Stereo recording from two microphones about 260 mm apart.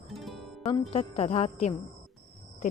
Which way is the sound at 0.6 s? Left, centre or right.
Left.